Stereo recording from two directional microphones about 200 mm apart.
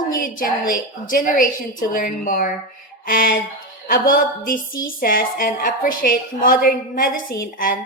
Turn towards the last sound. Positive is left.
turn(degrees=45)  # may be behind; listen again after turning